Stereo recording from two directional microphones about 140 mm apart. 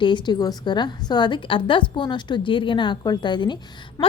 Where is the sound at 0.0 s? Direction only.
35° left (ahead or behind).